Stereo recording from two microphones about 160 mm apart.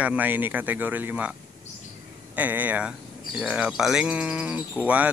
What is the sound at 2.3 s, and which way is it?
Speech, 10° right (ahead or behind).